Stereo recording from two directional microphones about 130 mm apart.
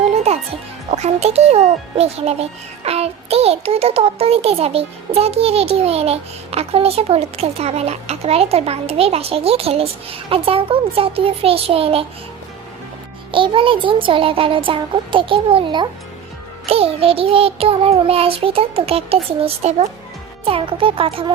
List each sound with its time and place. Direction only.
0.9 s a child's voice: 55° right (ahead or behind)
13.3 s a child's voice: 40° right (ahead or behind)